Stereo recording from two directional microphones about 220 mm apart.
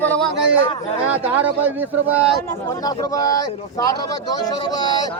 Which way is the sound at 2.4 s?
15° left (ahead or behind).